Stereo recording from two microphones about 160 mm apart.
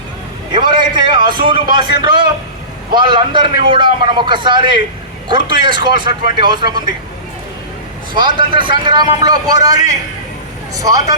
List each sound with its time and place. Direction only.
0.5 s a man's voice: 30° right (ahead or behind)
8.1 s a man's voice: 30° right (ahead or behind)